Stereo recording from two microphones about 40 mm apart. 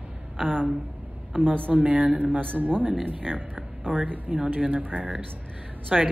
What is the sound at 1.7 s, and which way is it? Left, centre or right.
Speech, right.